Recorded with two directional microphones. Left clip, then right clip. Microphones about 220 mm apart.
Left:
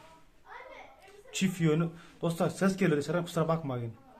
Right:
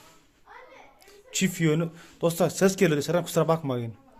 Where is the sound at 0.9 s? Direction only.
35° right (ahead or behind).